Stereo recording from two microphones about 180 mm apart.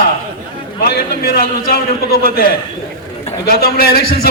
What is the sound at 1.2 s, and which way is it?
A man's voice, 60° left (ahead or behind).